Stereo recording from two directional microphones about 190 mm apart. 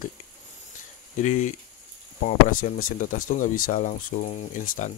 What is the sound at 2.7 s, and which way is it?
Speech, 45° left (ahead or behind).